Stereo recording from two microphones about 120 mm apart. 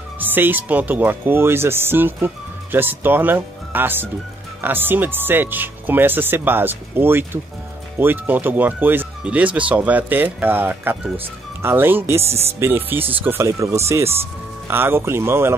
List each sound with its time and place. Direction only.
0.2 s speech: 15° right (ahead or behind)